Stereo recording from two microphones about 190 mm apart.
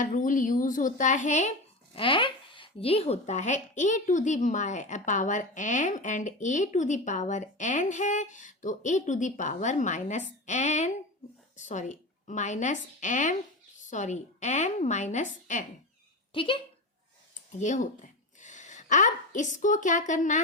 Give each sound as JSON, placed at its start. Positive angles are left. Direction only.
{"t": 0.0, "sound": "a woman's voice", "side_deg": 40}
{"t": 16.3, "sound": "a woman's voice", "side_deg": 25}
{"t": 17.6, "sound": "a woman's voice", "side_deg": 40}